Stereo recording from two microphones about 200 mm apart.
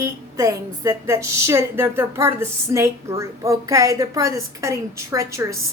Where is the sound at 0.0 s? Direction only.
15° right (ahead or behind).